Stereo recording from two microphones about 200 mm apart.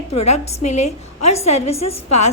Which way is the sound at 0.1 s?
30° left (ahead or behind).